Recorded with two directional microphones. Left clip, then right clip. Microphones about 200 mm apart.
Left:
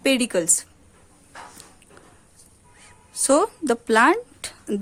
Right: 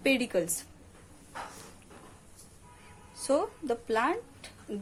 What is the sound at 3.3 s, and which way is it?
Speech, 45° left (ahead or behind).